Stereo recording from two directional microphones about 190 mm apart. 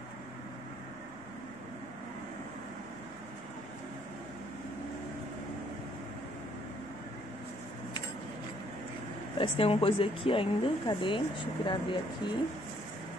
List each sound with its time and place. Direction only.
9.4 s speech: 30° left (ahead or behind)